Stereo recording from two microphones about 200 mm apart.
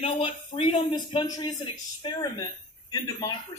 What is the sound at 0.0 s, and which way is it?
Speech, 30° left (ahead or behind).